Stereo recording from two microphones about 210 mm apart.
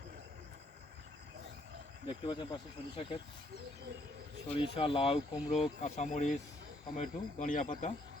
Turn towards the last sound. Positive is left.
turn(degrees=35)  # may be behind; listen again after turning